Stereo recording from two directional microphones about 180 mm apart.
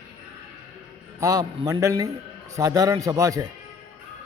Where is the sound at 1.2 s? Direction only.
20° right (ahead or behind).